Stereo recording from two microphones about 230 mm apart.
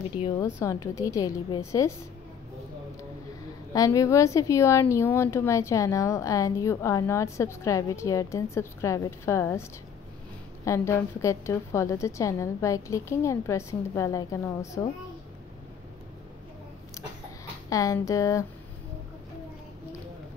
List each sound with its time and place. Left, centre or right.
0.6 s a woman's voice: centre
3.7 s a woman's voice: centre
17.6 s a woman's voice: centre